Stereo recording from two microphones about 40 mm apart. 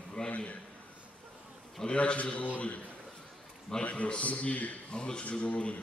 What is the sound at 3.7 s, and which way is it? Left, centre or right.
Speech, centre.